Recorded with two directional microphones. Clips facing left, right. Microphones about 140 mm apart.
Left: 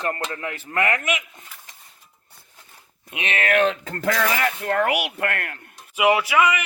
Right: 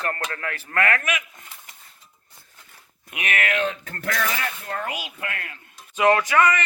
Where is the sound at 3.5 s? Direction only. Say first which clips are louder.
Left 6 dB; 85° left; by 5.6 s 60° left (ahead or behind).